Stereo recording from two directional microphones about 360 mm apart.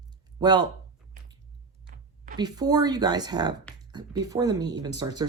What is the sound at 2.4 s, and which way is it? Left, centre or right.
Speech, centre.